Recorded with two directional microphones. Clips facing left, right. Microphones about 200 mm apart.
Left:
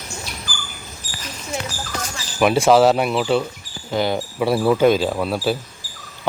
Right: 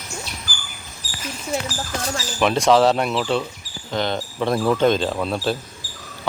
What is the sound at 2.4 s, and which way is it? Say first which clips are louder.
Speech: left 2 dB; 5° left (ahead or behind).